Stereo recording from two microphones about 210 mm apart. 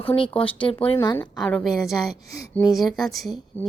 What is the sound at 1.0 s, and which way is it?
A woman's voice, 10° left (ahead or behind).